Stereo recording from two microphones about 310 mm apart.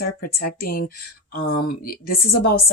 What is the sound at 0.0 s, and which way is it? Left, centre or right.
Speech, left.